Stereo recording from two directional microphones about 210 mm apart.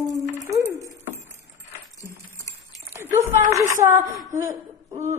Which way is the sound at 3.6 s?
15° right (ahead or behind).